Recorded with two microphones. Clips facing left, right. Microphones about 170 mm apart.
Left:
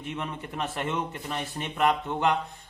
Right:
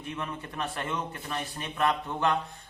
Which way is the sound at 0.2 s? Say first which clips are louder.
Left 2 dB; 20° left (ahead or behind).